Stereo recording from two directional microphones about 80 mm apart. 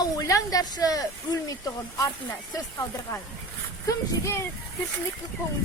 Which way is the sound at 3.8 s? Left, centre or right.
Left.